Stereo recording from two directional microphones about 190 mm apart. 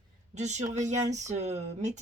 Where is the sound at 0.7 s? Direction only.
40° right (ahead or behind).